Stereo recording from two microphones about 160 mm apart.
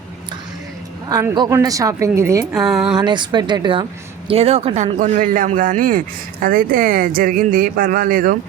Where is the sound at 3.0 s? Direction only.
30° right (ahead or behind).